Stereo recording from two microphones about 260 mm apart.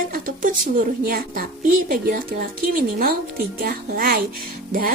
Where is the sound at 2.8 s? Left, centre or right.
Right.